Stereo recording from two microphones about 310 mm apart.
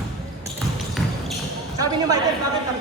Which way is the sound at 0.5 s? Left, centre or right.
Centre.